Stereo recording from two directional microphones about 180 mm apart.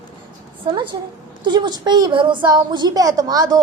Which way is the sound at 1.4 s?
25° right (ahead or behind).